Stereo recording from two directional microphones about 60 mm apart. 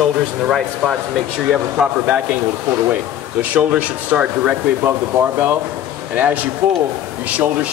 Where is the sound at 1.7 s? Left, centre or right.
Centre.